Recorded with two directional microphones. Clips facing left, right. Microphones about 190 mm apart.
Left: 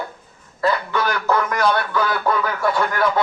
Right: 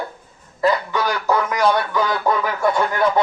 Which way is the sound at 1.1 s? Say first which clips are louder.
Right 1 dB; 15° right (ahead or behind).